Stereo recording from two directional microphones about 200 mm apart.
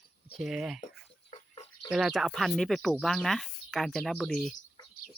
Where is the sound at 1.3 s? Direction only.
30° left (ahead or behind).